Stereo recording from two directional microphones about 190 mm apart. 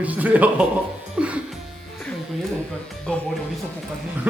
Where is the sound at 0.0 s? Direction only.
10° right (ahead or behind).